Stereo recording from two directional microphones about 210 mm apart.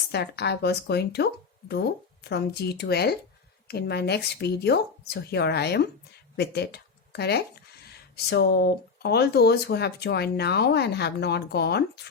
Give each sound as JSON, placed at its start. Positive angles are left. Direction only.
{"t": 0.1, "sound": "speech", "side_deg": 50}